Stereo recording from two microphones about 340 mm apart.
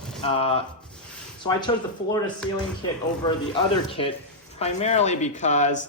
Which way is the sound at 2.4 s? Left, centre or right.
Centre.